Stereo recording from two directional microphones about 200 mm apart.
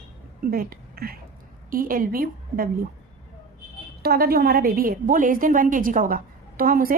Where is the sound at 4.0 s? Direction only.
50° right (ahead or behind).